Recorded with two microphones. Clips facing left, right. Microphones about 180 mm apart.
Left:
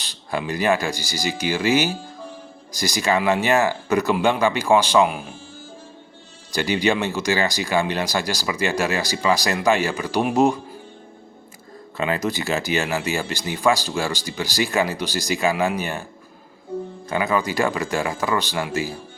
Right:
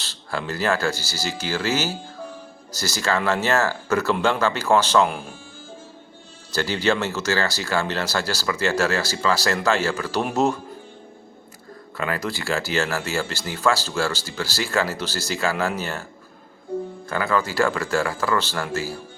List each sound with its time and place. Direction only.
0.0 s speech: 15° left (ahead or behind)
6.5 s speech: 15° left (ahead or behind)
11.9 s speech: 20° left (ahead or behind)
17.1 s speech: 20° left (ahead or behind)